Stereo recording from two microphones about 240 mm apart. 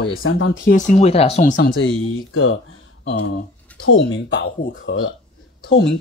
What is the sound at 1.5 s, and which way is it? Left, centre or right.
Speech, left.